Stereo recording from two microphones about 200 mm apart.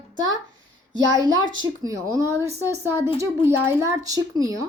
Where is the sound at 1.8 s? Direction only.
15° right (ahead or behind).